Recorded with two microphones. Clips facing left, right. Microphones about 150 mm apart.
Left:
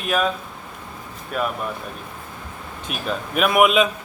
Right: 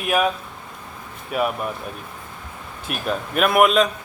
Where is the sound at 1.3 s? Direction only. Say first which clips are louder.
Right 2 dB; 10° right (ahead or behind).